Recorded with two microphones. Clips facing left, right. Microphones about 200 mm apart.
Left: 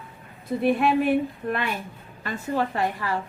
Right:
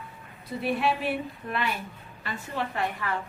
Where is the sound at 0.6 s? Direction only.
50° left (ahead or behind).